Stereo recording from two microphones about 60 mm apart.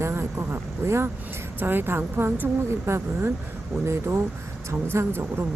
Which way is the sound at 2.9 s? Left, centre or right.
Right.